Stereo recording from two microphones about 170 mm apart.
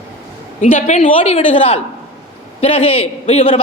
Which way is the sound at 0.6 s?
45° left (ahead or behind).